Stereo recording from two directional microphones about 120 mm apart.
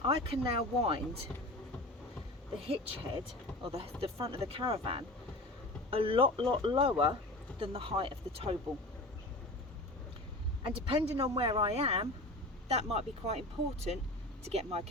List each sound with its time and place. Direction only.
0.0 s speech: 50° right (ahead or behind)
2.6 s speech: 50° right (ahead or behind)
10.6 s speech: 45° right (ahead or behind)